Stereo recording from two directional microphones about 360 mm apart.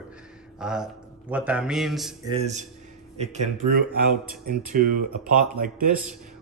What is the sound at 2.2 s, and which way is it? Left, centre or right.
A man's voice, centre.